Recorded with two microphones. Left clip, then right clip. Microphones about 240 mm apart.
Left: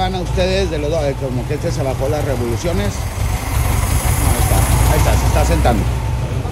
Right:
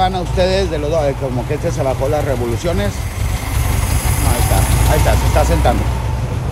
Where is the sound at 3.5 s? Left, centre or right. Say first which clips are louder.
Left 1 dB; centre.